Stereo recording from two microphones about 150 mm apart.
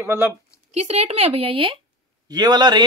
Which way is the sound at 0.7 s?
45° right (ahead or behind).